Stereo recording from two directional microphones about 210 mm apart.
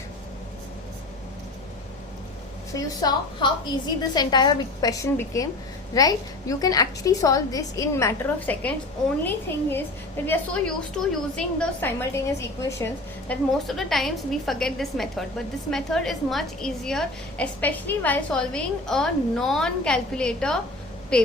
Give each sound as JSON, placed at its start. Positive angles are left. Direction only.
{"t": 2.7, "sound": "a woman's voice", "side_deg": 20}